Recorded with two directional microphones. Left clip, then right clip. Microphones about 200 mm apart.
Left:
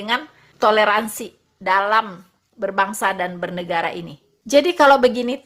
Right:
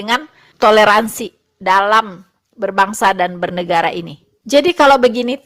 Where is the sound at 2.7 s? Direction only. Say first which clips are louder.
Right 6 dB; 45° right (ahead or behind).